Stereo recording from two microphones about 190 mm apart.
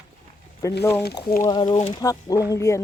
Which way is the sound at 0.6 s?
15° left (ahead or behind).